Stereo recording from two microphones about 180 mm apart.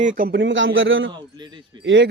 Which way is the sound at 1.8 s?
80° right.